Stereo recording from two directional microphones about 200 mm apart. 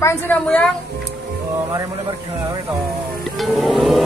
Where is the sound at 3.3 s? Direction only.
Centre (ahead or behind).